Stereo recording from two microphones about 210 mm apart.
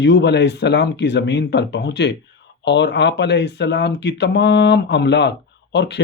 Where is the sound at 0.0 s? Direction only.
55° left (ahead or behind).